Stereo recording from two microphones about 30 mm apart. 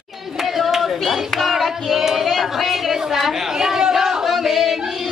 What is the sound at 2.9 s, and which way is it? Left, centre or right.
Chatter, centre.